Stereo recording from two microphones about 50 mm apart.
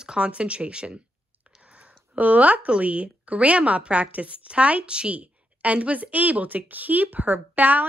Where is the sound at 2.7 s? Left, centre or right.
Right.